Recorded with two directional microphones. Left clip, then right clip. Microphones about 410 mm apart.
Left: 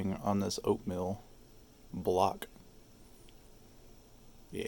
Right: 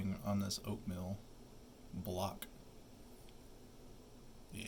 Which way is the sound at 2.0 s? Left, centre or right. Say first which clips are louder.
Left 13 dB; centre.